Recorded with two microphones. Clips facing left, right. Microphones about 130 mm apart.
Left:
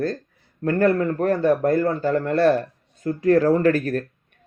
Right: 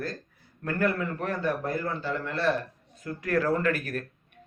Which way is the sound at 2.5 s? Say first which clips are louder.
Left 8 dB; 30° left (ahead or behind).